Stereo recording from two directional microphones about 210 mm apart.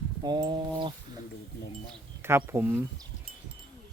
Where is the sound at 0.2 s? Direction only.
20° right (ahead or behind).